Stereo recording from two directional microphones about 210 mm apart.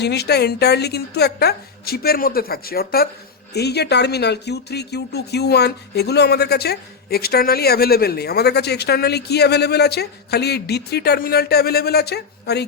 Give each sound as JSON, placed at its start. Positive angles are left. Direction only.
{"t": 0.0, "sound": "speech", "side_deg": 50}